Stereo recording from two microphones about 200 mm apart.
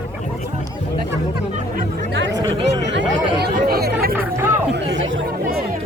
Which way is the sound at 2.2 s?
60° right (ahead or behind).